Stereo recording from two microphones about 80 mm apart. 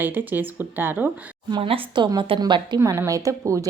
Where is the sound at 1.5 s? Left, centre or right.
Right.